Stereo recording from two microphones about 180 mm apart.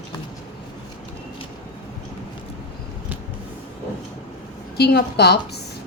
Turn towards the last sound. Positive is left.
turn(degrees=65)  # may be behind; listen again after turning